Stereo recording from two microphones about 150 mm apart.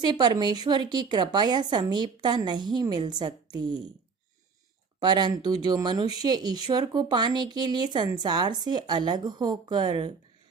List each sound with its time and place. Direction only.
0.0 s a woman's voice: 30° right (ahead or behind)
4.9 s a woman's voice: 30° right (ahead or behind)